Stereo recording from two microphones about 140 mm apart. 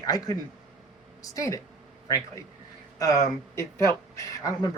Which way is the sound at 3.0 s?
25° left (ahead or behind).